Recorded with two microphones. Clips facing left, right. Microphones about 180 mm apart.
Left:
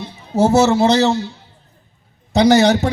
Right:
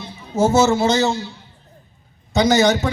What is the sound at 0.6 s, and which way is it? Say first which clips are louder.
Speech: left 3 dB; 65° left (ahead or behind).